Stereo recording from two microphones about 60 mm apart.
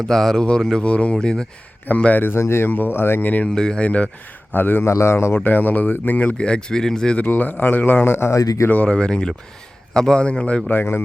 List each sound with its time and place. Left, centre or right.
0.1 s speech: centre
2.0 s speech: left
2.4 s speech: left
3.5 s speech: centre
4.5 s speech: left
4.9 s speech: left; by 7.2 s centre
7.3 s speech: left
8.0 s speech: left
8.3 s speech: left
8.9 s speech: centre
10.7 s speech: left